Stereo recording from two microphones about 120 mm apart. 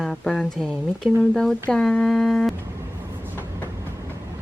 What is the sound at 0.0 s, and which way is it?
Speech, centre (ahead or behind).